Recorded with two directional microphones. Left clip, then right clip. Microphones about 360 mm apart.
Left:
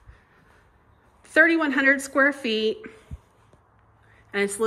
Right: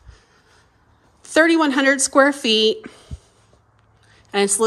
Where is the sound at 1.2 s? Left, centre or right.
Centre.